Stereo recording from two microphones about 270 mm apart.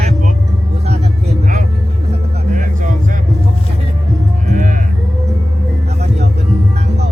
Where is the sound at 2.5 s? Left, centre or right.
Right.